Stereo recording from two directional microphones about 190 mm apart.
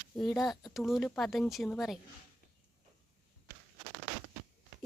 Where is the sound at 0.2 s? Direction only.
Centre (ahead or behind).